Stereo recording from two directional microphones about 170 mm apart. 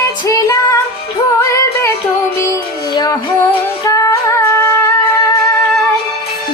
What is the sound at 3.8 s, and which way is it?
Music, 20° left (ahead or behind).